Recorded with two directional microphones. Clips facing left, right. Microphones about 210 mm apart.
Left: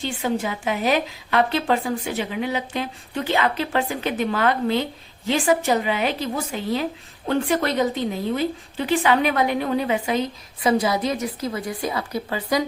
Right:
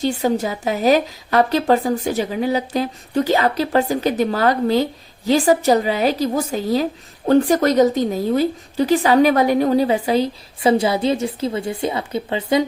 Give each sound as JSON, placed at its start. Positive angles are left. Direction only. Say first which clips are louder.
{"t": 0.0, "sound": "a woman's voice", "louder": "right 6 dB", "side_deg": -40}